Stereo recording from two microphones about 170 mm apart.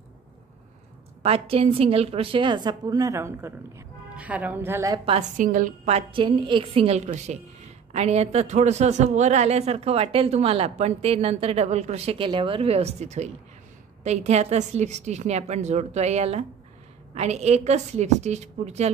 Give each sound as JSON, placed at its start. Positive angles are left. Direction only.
{"t": 1.2, "sound": "a woman's voice", "side_deg": -35}
{"t": 5.4, "sound": "speech", "side_deg": -50}